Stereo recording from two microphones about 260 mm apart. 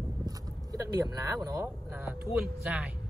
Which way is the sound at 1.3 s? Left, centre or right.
Centre.